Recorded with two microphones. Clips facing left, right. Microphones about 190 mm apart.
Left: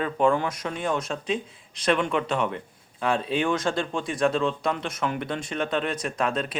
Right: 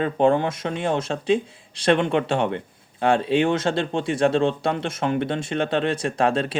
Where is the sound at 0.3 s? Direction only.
25° right (ahead or behind).